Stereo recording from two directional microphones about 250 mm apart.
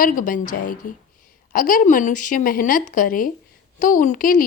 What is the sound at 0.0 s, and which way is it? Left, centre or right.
Speech, left.